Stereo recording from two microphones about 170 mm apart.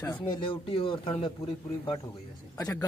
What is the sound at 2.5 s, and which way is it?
Speech, 20° left (ahead or behind).